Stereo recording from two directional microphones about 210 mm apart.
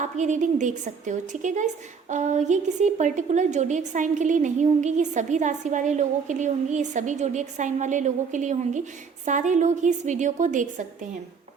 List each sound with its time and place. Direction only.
0.0 s a woman's voice: 35° right (ahead or behind)